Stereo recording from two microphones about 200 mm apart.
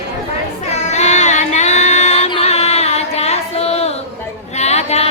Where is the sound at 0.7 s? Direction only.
35° left (ahead or behind).